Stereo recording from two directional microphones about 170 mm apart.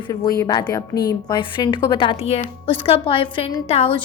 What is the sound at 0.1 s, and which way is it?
A woman's voice, 20° left (ahead or behind).